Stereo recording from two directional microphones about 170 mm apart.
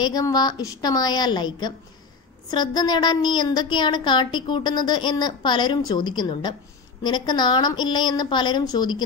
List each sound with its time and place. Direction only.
0.0 s a woman's voice: 20° left (ahead or behind)